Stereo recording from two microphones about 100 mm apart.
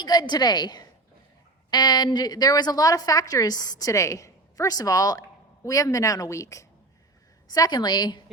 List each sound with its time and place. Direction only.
0.0 s a woman's voice: 45° left (ahead or behind)